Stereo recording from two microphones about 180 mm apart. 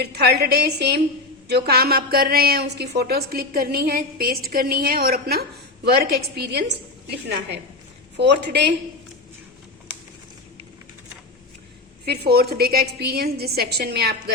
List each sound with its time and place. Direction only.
0.0 s a woman's voice: 65° right (ahead or behind)
8.1 s a woman's voice: 70° right (ahead or behind)
12.0 s a woman's voice: 60° right (ahead or behind)